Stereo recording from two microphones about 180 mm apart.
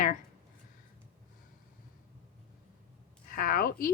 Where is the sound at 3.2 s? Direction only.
50° left (ahead or behind).